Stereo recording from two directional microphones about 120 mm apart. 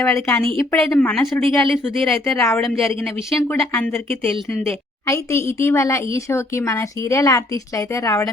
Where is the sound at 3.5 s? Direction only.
15° left (ahead or behind).